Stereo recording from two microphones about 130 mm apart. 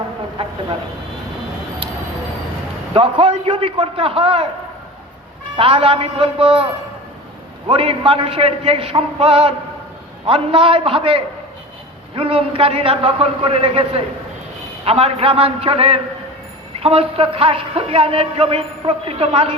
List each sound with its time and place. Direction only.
2.9 s a man's voice: 40° right (ahead or behind)
5.5 s a man's voice: 45° right (ahead or behind)
7.7 s a man's voice: 45° right (ahead or behind)